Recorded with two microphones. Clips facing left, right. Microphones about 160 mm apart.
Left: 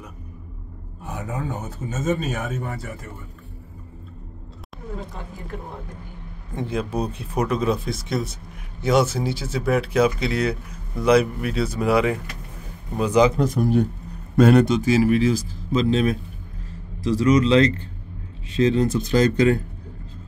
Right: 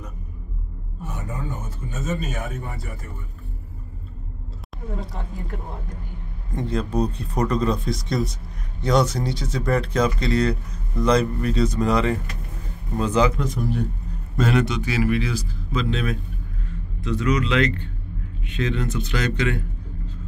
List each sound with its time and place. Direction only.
1.6 s speech: 75° left (ahead or behind)
6.5 s speech: 10° left (ahead or behind)
14.3 s a man's voice: 55° left (ahead or behind)